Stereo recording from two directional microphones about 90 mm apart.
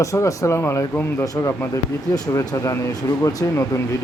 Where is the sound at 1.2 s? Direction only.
40° left (ahead or behind).